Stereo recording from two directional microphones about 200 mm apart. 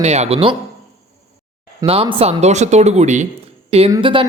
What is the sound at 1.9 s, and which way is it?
A woman's voice, 30° right (ahead or behind).